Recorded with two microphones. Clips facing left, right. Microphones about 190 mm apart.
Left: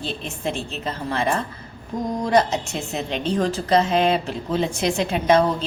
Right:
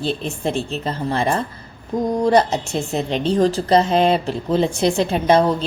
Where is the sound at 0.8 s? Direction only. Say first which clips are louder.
Right 1 dB; 35° right (ahead or behind).